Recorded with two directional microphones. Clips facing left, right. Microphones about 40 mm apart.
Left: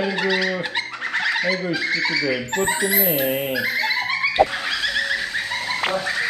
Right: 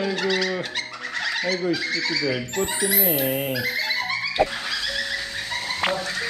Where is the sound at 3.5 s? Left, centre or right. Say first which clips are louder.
Left 3 dB; left.